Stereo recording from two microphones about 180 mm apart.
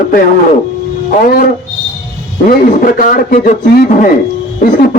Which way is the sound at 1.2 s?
55° left (ahead or behind).